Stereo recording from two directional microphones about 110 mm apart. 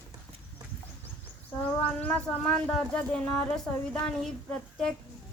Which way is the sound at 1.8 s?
15° left (ahead or behind).